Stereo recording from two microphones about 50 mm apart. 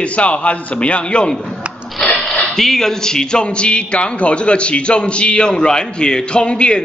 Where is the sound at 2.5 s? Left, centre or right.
Centre.